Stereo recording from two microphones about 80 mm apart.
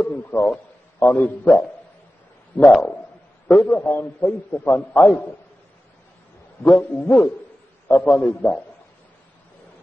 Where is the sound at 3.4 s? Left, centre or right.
Centre.